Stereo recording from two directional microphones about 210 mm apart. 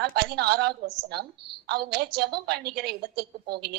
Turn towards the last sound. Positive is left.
turn(degrees=-50)  # may be behind; listen again after turning